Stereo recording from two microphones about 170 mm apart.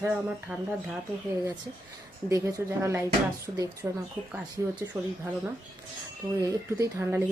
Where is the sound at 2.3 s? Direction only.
15° right (ahead or behind).